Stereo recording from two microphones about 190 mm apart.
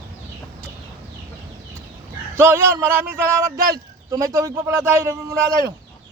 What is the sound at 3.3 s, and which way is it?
Speech, 15° right (ahead or behind).